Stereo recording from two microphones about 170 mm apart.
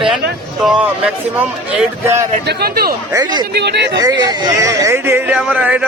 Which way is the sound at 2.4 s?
65° right (ahead or behind).